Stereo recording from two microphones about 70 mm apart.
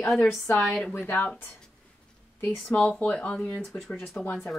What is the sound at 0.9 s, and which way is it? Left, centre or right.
Speech, left.